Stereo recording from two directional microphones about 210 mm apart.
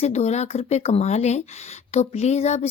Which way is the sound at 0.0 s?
30° left (ahead or behind).